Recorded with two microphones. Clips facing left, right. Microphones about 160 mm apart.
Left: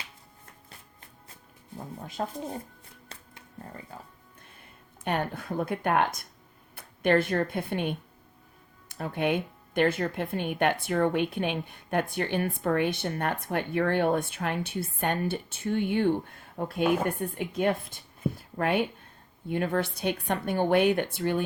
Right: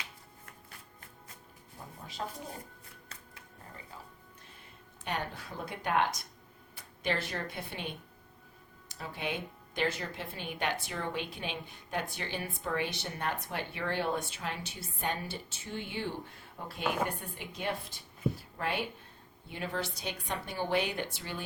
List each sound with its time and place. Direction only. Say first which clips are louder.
2.2 s a woman's voice: left 6 dB; 45° left (ahead or behind)
3.9 s a woman's voice: left 4 dB; 50° left (ahead or behind)